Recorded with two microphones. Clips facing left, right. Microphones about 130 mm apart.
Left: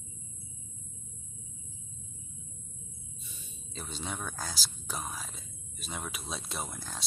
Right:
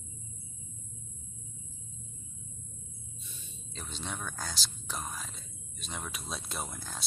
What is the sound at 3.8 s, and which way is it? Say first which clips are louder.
Speech: left 2 dB; 5° left (ahead or behind).